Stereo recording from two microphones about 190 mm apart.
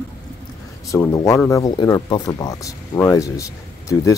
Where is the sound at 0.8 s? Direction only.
15° left (ahead or behind).